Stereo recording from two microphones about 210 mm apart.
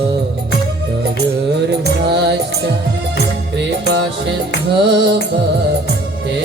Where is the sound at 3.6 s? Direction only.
55° right (ahead or behind).